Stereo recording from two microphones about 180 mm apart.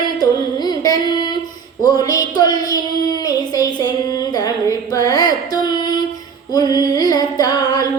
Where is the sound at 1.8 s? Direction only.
20° left (ahead or behind).